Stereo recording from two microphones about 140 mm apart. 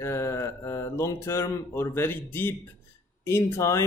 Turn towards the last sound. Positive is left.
turn(degrees=20)  # may be behind; listen again after turning